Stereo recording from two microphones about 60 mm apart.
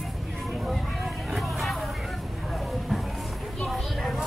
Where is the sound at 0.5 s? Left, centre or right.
Centre.